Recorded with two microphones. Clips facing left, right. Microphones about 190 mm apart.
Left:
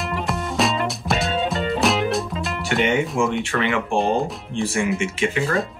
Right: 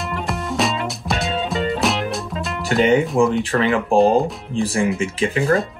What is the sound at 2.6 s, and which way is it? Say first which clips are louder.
Music: right 5 dB; 35° right (ahead or behind).